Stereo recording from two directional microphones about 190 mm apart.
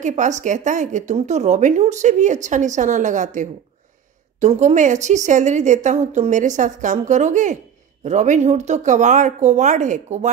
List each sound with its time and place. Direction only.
0.0 s a woman's voice: 40° right (ahead or behind)